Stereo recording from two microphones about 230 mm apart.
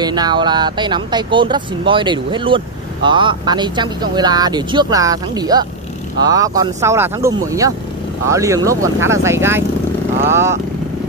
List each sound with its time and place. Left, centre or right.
0.0 s speech: centre